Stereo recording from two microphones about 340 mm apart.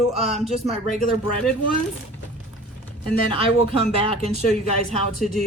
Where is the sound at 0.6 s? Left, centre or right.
Centre.